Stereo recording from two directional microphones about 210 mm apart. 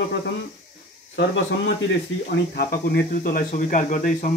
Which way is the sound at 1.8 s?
50° left (ahead or behind).